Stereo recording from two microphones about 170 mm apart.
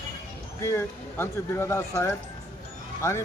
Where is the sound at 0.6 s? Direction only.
15° left (ahead or behind).